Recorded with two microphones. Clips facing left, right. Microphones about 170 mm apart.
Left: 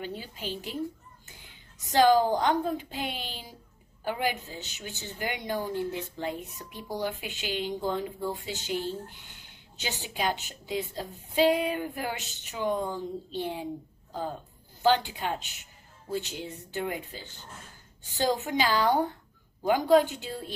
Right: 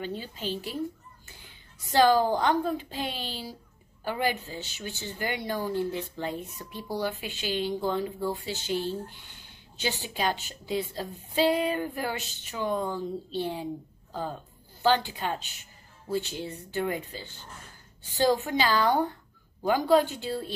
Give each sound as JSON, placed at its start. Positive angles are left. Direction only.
{"t": 0.0, "sound": "a woman's voice", "side_deg": 10}
{"t": 2.0, "sound": "a woman's voice", "side_deg": 15}
{"t": 10.1, "sound": "a woman's voice", "side_deg": 15}
{"t": 14.8, "sound": "a woman's voice", "side_deg": 15}